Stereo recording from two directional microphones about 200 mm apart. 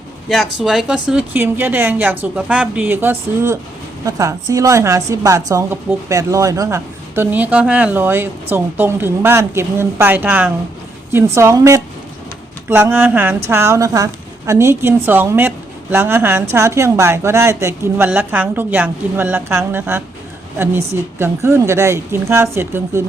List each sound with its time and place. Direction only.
0.3 s speech: centre (ahead or behind)